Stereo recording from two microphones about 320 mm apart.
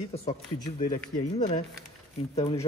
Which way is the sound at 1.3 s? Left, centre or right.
Left.